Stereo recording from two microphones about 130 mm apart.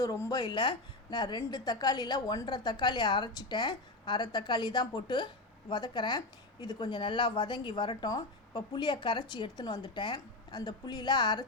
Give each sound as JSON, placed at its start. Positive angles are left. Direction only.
{"t": 0.0, "sound": "a woman's voice", "side_deg": 25}